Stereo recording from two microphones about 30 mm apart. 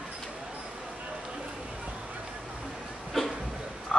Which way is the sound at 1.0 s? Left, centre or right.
Right.